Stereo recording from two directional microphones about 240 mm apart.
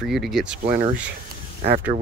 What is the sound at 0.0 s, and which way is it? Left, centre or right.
Speech, centre.